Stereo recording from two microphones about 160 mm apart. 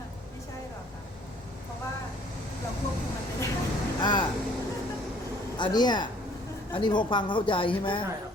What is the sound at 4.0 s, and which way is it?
Speech, 30° left (ahead or behind).